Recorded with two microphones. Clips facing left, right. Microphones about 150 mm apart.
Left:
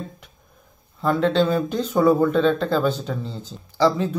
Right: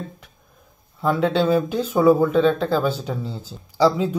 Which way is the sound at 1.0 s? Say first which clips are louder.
Even; 5° right (ahead or behind).